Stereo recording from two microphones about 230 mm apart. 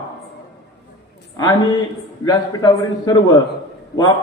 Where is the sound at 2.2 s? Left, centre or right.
Centre.